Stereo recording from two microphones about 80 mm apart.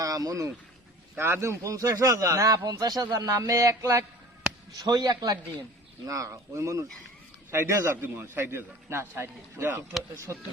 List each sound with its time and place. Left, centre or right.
0.0 s speech: right
1.1 s a man's voice: right
1.5 s a man's voice: right
4.8 s a man's voice: right
6.1 s a man's voice: right